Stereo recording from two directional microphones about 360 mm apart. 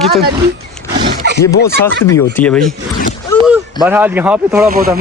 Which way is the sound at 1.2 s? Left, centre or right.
Right.